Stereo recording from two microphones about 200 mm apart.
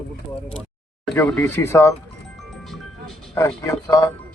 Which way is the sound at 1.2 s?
10° left (ahead or behind).